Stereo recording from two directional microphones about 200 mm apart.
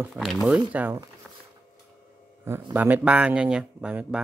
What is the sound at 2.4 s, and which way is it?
A man's voice, 10° right (ahead or behind).